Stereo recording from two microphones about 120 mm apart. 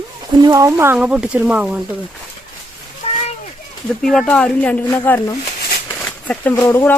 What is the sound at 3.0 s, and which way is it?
Splash, 60° left (ahead or behind).